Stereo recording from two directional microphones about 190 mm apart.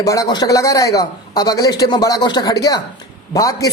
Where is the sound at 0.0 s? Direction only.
15° left (ahead or behind).